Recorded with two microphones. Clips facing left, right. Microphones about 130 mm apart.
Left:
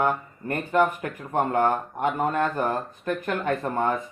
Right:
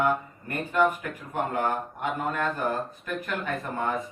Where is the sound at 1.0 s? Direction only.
45° left (ahead or behind).